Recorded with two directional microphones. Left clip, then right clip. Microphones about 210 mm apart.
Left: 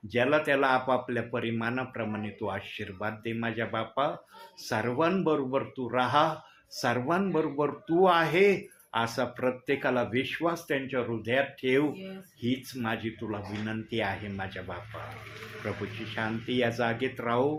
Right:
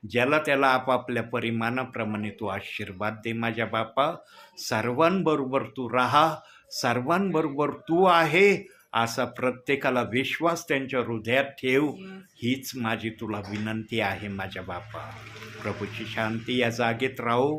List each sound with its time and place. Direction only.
0.1 s speech: 30° right (ahead or behind)